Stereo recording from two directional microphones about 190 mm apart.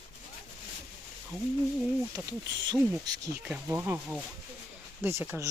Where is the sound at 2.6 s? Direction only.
20° right (ahead or behind).